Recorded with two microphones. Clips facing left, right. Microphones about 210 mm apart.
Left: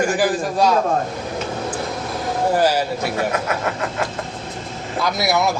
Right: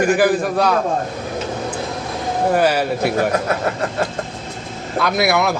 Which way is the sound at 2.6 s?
60° right (ahead or behind).